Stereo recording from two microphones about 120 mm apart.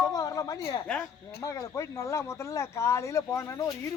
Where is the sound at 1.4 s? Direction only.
25° left (ahead or behind).